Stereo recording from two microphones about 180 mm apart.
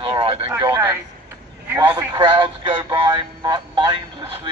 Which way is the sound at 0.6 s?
25° right (ahead or behind).